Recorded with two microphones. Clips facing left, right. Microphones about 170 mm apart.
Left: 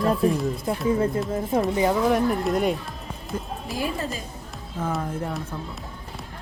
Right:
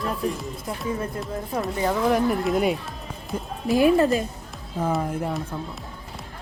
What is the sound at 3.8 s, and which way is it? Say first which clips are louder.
Speech: right 11 dB; 60° right (ahead or behind).